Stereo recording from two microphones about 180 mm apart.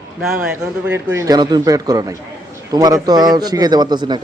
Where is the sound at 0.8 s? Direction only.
15° right (ahead or behind).